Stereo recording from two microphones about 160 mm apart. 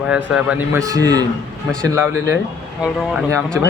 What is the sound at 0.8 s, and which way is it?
Speech, 20° right (ahead or behind).